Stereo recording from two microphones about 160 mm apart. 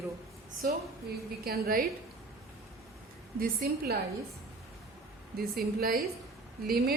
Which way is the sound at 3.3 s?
70° right (ahead or behind).